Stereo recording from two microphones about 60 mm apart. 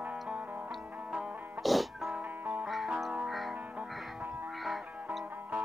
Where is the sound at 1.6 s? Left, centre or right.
Centre.